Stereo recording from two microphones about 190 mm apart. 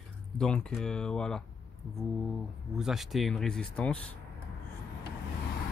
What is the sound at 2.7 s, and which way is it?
Speech, centre (ahead or behind).